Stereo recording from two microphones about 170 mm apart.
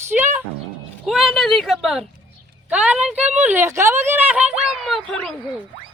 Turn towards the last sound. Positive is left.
turn(degrees=0)  # may be behind; listen again after turning